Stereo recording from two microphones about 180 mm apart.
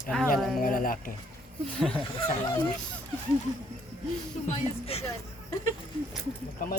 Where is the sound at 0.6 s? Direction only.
50° left (ahead or behind).